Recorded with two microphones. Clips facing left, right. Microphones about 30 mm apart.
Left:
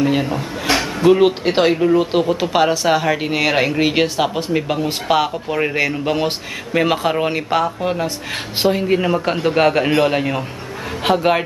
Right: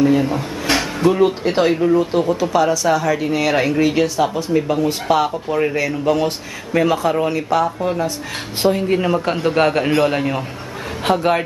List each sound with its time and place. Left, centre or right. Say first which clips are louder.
0.3 s a sound: even; centre
1.2 s speech: left 1 dB; left
1.7 s a man's voice: left 1 dB; centre
2.2 s speech: even; left
3.9 s speech: even; left; by 5.8 s centre
5.8 s speech: right 1 dB; left
7.8 s a man's voice: even; left